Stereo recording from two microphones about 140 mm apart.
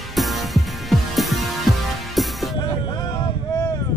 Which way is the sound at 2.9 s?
30° left (ahead or behind).